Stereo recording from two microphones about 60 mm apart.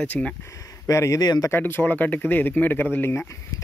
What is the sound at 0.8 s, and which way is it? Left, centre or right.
Speech, left.